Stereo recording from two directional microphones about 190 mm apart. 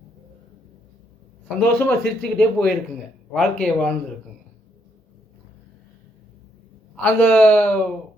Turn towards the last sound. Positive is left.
turn(degrees=5)  # may be behind; listen again after turning